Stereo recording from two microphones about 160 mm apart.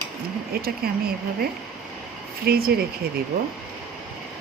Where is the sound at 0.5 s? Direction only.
70° right (ahead or behind).